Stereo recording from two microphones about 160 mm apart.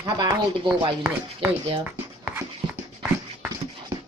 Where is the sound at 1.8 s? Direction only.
10° right (ahead or behind).